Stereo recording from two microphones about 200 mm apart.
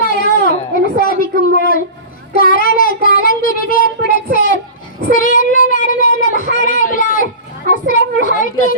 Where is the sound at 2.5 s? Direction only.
45° left (ahead or behind).